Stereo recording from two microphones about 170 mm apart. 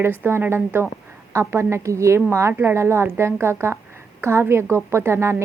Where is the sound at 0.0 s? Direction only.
15° right (ahead or behind).